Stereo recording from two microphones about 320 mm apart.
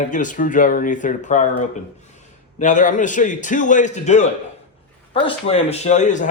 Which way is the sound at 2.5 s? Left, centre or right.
Left.